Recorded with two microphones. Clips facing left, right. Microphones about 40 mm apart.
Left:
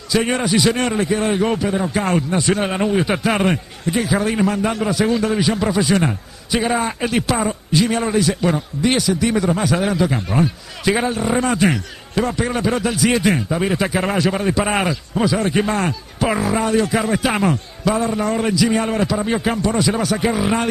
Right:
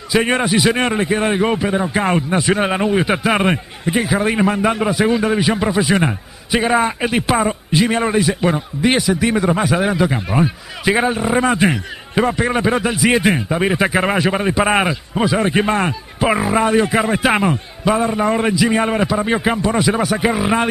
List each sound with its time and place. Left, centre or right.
0.1 s a man's voice: right